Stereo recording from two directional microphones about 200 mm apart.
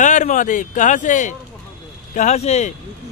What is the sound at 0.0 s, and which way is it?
Speech, 40° left (ahead or behind).